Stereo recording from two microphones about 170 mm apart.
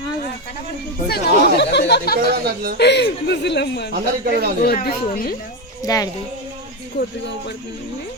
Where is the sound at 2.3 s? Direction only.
60° right (ahead or behind).